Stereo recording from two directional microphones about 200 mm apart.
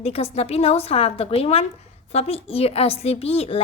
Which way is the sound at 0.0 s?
30° left (ahead or behind).